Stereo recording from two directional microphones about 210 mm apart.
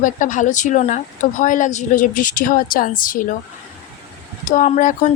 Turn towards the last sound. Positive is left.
turn(degrees=40)  # may be behind; listen again after turning